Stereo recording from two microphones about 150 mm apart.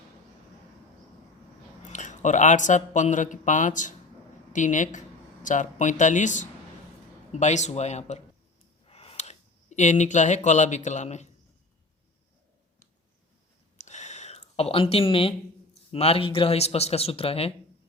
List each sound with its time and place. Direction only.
1.9 s speech: 55° left (ahead or behind)
13.7 s a sound: 50° left (ahead or behind)
15.9 s speech: 40° left (ahead or behind)